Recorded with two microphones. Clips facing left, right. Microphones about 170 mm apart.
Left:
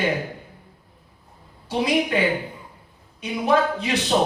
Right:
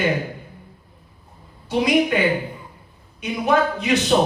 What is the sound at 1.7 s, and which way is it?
Music, 30° left (ahead or behind).